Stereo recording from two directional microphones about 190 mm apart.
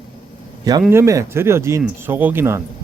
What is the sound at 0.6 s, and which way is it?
Speech, 15° right (ahead or behind).